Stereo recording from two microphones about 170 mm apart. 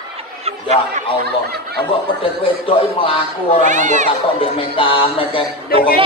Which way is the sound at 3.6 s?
45° right (ahead or behind).